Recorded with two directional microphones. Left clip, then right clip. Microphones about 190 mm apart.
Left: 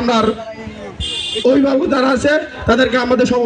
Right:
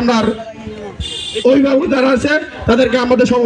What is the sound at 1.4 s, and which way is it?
A man's voice, centre (ahead or behind).